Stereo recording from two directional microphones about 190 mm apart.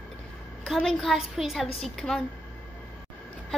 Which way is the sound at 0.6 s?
Centre (ahead or behind).